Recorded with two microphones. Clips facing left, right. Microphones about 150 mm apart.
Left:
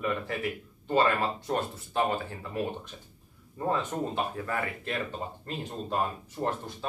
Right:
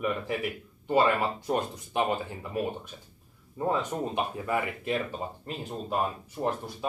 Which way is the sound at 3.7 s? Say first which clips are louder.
Right 1 dB; 15° right (ahead or behind).